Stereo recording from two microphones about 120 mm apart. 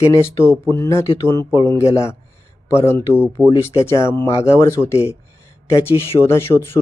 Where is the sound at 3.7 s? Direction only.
25° left (ahead or behind).